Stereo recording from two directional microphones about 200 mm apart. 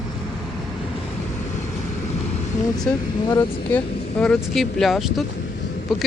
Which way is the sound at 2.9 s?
5° left (ahead or behind).